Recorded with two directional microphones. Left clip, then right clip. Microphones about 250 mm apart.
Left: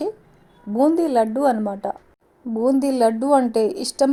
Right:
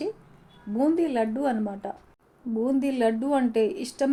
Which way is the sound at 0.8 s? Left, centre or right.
Left.